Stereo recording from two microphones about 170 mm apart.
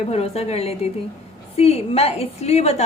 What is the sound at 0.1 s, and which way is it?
A woman's voice, 40° left (ahead or behind).